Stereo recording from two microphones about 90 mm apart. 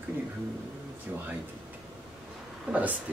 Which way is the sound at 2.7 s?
15° right (ahead or behind).